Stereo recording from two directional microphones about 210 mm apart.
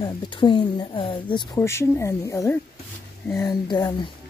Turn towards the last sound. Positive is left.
turn(degrees=20)  # may be behind; listen again after turning